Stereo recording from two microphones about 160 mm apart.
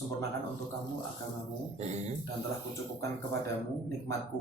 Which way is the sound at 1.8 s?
45° right (ahead or behind).